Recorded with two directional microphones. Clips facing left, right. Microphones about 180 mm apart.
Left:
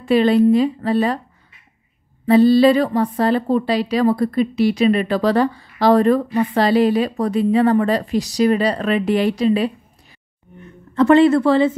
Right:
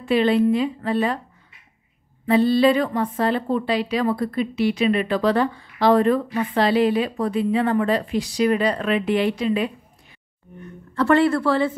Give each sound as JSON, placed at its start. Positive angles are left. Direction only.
{"t": 0.0, "sound": "a woman's voice", "side_deg": 40}
{"t": 2.2, "sound": "a woman's voice", "side_deg": 40}
{"t": 11.0, "sound": "speech", "side_deg": 20}